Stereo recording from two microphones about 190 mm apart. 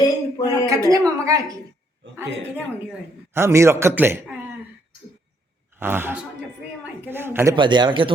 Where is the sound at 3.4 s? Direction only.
15° right (ahead or behind).